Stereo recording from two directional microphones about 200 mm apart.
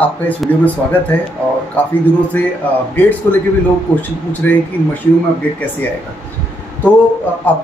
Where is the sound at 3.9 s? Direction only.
10° left (ahead or behind).